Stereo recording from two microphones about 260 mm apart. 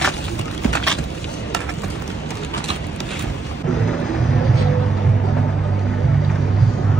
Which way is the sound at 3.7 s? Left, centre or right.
Centre.